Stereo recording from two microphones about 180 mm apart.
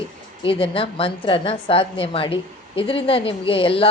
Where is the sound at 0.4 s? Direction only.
30° left (ahead or behind).